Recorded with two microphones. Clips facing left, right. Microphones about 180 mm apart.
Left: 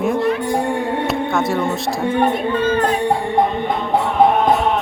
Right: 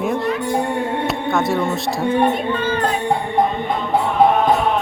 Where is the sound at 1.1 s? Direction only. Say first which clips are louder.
Even; centre (ahead or behind).